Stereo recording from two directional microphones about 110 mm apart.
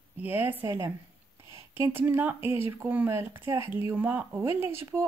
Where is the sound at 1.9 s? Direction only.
20° right (ahead or behind).